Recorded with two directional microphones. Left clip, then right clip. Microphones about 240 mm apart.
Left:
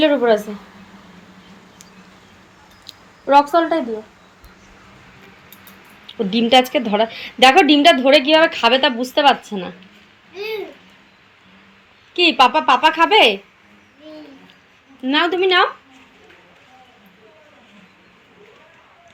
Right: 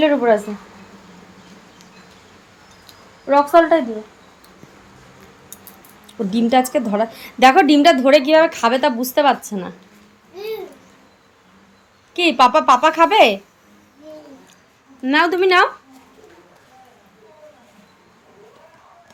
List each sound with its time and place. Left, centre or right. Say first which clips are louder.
0.0 s a woman's voice: even; centre
2.8 s a sound: left 3 dB; centre
6.1 s a woman's voice: left 3 dB; centre
12.1 s a woman's voice: even; centre
15.0 s a woman's voice: right 1 dB; centre